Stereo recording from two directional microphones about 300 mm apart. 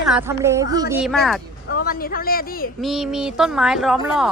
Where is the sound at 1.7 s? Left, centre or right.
Left.